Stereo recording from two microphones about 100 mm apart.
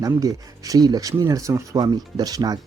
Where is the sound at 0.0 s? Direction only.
35° right (ahead or behind).